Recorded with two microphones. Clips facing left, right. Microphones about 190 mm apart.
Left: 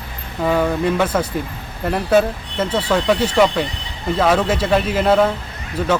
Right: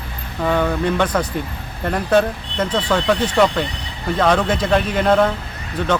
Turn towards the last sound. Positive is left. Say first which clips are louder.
# left 1 dB
turn(degrees=5)  # may be behind; listen again after turning